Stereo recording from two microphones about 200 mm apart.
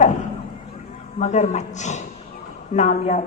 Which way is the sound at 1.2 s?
35° left (ahead or behind).